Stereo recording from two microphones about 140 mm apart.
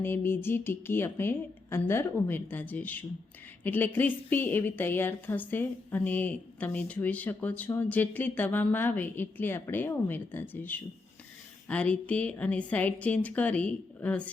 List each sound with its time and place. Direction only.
0.0 s a woman's voice: 15° left (ahead or behind)